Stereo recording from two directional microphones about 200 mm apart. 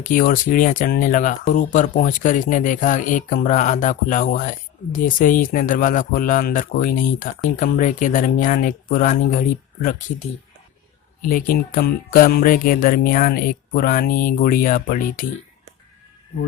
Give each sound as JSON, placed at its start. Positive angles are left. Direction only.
{"t": 0.0, "sound": "speech", "side_deg": 45}
{"t": 11.2, "sound": "speech", "side_deg": 45}